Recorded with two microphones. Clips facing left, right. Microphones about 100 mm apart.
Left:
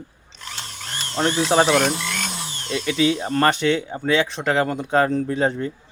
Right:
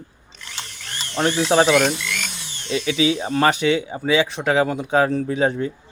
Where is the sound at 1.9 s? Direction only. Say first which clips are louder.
Left 1 dB; 35° left (ahead or behind).